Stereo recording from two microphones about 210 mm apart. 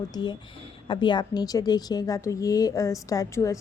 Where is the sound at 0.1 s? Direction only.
20° left (ahead or behind).